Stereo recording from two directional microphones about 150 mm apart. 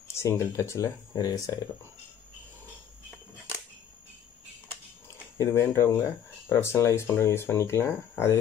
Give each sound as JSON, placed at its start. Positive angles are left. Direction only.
{"t": 0.1, "sound": "speech", "side_deg": 20}
{"t": 5.4, "sound": "speech", "side_deg": 15}